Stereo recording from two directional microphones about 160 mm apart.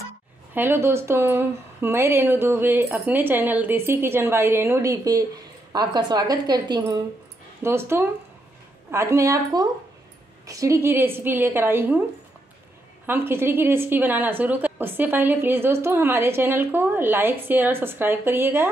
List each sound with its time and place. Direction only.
0.6 s a woman's voice: 15° right (ahead or behind)
13.0 s a woman's voice: 15° right (ahead or behind)